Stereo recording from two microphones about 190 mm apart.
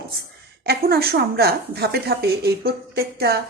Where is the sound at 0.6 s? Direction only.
55° right (ahead or behind).